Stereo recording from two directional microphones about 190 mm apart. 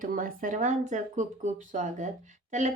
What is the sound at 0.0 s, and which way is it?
Speech, 45° right (ahead or behind).